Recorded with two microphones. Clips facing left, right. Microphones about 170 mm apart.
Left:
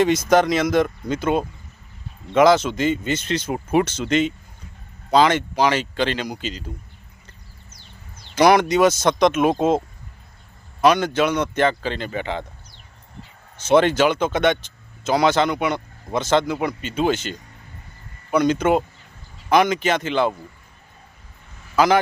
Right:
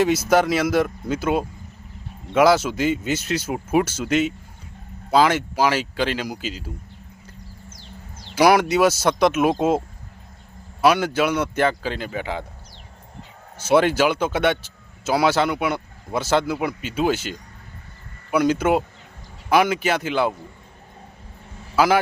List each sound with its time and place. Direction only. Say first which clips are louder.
0.0 s speech: left 1 dB; 5° right (ahead or behind)
7.7 s a sound: right 6 dB; 90° right
8.4 s speech: left 1 dB; 5° right (ahead or behind)
13.6 s speech: left 1 dB; 10° right (ahead or behind)
21.8 s a man's voice: left 1 dB; 10° right (ahead or behind)